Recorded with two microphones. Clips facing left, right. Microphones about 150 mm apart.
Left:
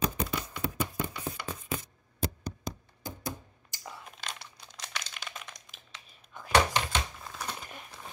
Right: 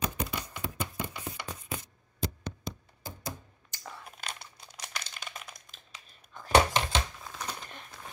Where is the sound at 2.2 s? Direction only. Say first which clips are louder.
Left 1 dB; 45° left (ahead or behind).